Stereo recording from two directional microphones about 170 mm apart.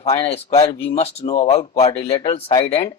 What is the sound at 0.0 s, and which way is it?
Speech, 35° left (ahead or behind).